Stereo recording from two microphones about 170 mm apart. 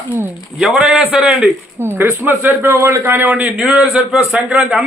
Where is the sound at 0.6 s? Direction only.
Centre (ahead or behind).